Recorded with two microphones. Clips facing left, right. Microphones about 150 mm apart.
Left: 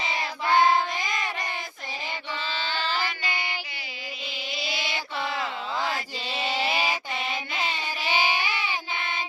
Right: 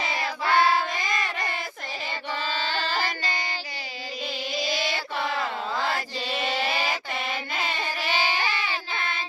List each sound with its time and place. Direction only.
0.4 s child singing: 15° left (ahead or behind)
2.3 s child singing: 45° right (ahead or behind)
4.5 s chant: 45° right (ahead or behind)
6.4 s sheep: 15° left (ahead or behind)
8.0 s child singing: 15° left (ahead or behind)